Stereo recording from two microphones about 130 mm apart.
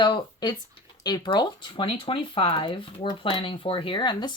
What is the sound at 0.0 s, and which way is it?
Speech, 35° left (ahead or behind).